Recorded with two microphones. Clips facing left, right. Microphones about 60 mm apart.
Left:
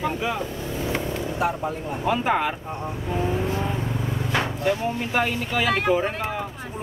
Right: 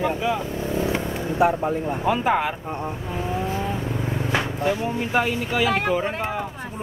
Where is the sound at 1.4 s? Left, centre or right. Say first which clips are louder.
Right 6 dB; right.